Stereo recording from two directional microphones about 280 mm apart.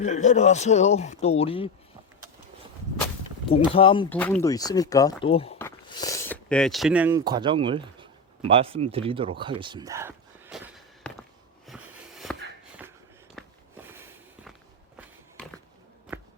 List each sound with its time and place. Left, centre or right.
0.0 s speech: left
3.5 s speech: centre
4.1 s speech: centre
8.4 s a sound: centre
14.9 s walk: centre